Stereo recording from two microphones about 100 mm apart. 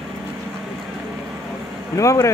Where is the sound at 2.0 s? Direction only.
35° left (ahead or behind).